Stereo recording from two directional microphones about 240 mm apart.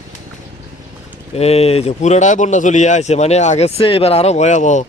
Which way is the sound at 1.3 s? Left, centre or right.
Left.